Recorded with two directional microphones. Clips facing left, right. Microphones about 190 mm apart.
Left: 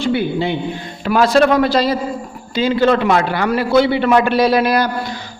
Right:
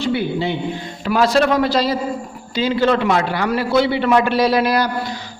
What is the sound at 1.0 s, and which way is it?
A man's voice, 55° left (ahead or behind).